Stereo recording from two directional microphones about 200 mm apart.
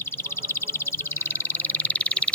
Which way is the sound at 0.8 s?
10° left (ahead or behind).